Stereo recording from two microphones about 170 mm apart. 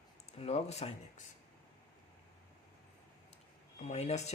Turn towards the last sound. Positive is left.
turn(degrees=40)  # may be behind; listen again after turning